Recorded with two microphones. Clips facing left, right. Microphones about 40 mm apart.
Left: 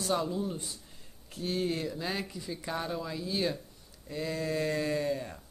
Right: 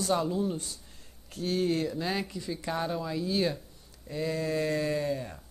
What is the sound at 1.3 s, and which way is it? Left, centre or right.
Speech, left.